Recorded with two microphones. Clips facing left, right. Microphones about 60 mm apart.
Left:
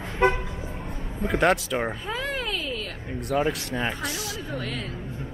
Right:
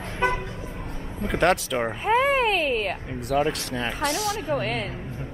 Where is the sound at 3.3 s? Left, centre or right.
Centre.